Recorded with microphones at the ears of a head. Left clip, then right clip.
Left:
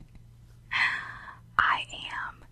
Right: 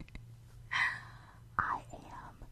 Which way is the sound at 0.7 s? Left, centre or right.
Left.